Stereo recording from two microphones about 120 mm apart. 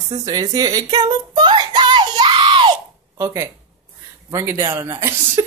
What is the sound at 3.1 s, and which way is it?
Speech, 25° right (ahead or behind).